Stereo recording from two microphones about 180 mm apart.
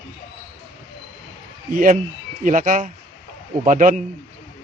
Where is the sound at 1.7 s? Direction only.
50° right (ahead or behind).